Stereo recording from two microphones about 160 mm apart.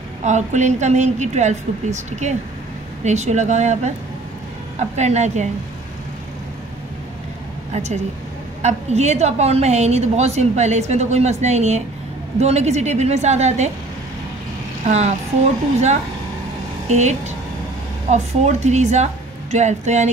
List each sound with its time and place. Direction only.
0.2 s a woman's voice: 45° right (ahead or behind)
7.7 s a woman's voice: 45° right (ahead or behind)
14.9 s a woman's voice: 45° right (ahead or behind)